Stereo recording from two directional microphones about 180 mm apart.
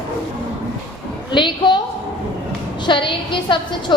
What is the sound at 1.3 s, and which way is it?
Speech, 25° left (ahead or behind).